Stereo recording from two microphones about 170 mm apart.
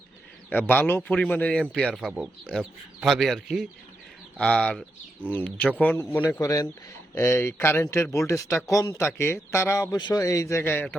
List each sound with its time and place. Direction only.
0.5 s a man's voice: 10° left (ahead or behind)
6.2 s a man's voice: 20° left (ahead or behind)